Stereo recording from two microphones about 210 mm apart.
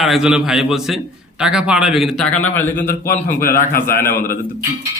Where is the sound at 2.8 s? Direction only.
45° left (ahead or behind).